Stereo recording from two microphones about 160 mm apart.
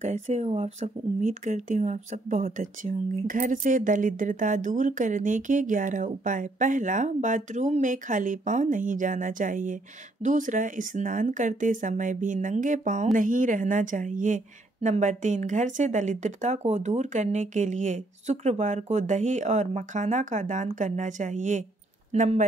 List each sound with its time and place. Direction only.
0.0 s speech: 45° right (ahead or behind)